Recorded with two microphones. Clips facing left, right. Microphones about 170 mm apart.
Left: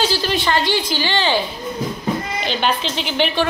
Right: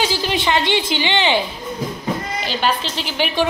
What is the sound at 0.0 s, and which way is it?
A woman's voice, 15° right (ahead or behind).